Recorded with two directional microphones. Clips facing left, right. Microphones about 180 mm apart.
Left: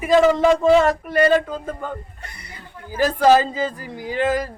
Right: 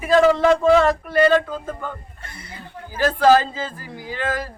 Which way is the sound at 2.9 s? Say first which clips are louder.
Even; 15° left (ahead or behind).